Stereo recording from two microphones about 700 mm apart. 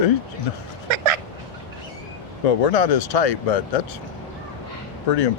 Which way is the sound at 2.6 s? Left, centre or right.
Left.